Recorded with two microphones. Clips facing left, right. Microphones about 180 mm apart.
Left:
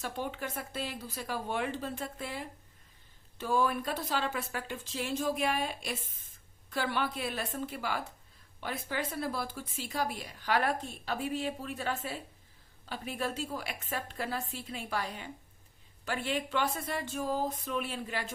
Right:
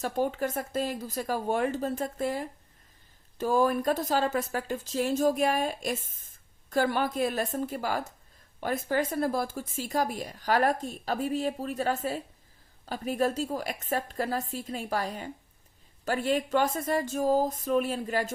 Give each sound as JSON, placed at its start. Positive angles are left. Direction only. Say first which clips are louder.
{"t": 0.0, "sound": "speech", "louder": "right 8 dB", "side_deg": -40}